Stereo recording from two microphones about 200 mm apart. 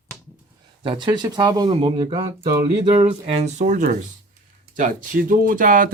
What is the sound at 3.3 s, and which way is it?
Speech, 35° right (ahead or behind).